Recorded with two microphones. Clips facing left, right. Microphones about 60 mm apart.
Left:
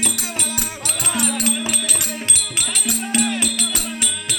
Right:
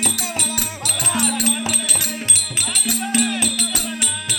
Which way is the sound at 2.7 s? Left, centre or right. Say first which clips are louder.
Right 1 dB; left.